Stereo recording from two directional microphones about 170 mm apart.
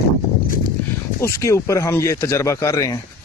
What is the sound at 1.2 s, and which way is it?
Speech, 15° left (ahead or behind).